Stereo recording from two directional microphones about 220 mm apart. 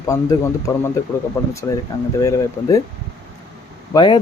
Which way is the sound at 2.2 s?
15° left (ahead or behind).